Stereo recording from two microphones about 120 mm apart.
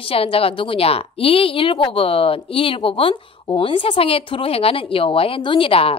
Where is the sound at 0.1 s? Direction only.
50° left (ahead or behind).